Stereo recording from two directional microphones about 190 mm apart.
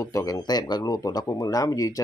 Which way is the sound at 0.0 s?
15° left (ahead or behind).